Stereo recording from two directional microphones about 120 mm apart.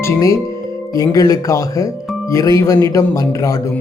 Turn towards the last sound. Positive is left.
turn(degrees=30)  # may be behind; listen again after turning